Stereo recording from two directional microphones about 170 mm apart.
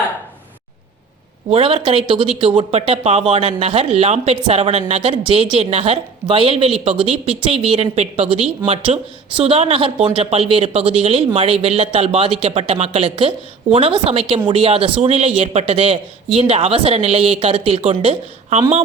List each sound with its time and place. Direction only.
1.5 s speech: 35° right (ahead or behind)